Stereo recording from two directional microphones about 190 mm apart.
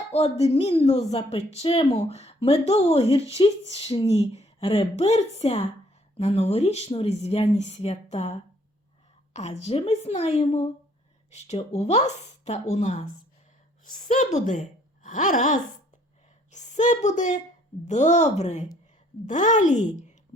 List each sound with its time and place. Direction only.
0.1 s a woman's voice: 35° left (ahead or behind)